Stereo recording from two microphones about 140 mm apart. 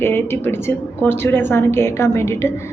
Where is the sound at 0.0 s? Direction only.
15° left (ahead or behind).